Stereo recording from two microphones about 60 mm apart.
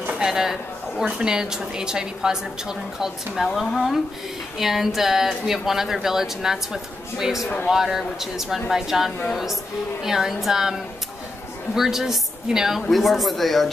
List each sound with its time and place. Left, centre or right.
0.2 s a woman's voice: centre